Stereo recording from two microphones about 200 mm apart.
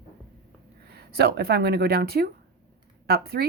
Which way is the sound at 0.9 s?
55° right (ahead or behind).